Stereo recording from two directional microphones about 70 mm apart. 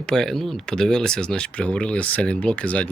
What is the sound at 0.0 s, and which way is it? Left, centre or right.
Speech, centre.